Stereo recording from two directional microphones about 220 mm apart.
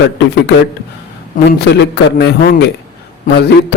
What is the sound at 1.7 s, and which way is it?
Speech, 50° left (ahead or behind).